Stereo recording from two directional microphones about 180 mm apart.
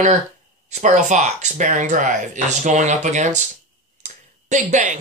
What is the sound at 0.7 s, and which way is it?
Speech, 40° right (ahead or behind).